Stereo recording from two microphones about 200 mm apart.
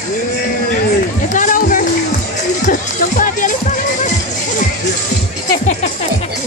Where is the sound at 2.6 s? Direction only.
40° left (ahead or behind).